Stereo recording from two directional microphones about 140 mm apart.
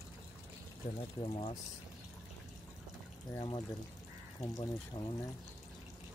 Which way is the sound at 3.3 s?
30° left (ahead or behind).